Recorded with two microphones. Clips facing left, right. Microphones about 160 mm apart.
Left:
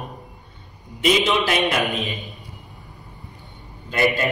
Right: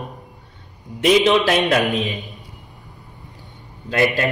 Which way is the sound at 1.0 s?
75° right (ahead or behind).